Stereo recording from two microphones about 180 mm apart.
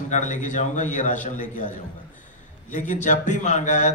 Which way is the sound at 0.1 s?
45° left (ahead or behind).